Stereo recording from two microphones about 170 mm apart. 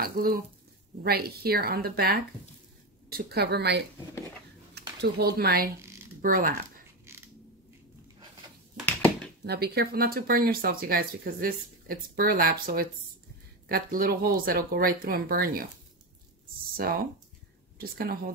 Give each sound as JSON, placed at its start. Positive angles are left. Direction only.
{"t": 0.0, "sound": "a woman's voice", "side_deg": -60}
{"t": 4.7, "sound": "speech", "side_deg": -65}
{"t": 7.1, "sound": "mechanisms", "side_deg": -15}
{"t": 8.8, "sound": "a sound", "side_deg": 10}
{"t": 9.5, "sound": "speech", "side_deg": -70}
{"t": 16.7, "sound": "speech", "side_deg": -60}